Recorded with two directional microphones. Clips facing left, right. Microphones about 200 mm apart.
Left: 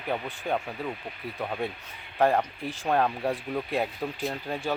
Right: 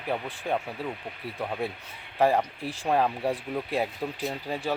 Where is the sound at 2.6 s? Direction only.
30° right (ahead or behind).